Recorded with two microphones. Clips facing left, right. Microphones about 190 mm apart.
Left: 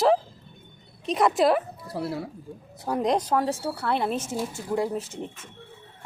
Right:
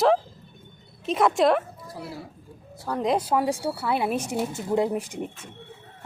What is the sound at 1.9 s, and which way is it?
Speech, 65° left (ahead or behind).